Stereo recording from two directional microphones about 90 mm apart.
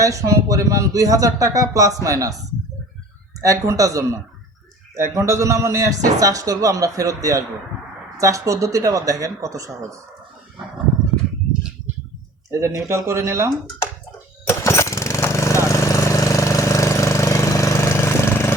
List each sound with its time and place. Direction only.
0.0 s a man's voice: 40° right (ahead or behind)
3.4 s a man's voice: 40° right (ahead or behind)
12.5 s a man's voice: 35° right (ahead or behind)
14.4 s lawn mower: 30° left (ahead or behind)